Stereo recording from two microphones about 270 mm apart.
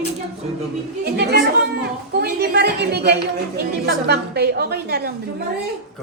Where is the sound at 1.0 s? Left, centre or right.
Right.